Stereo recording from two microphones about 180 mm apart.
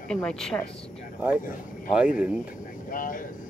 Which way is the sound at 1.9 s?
5° right (ahead or behind).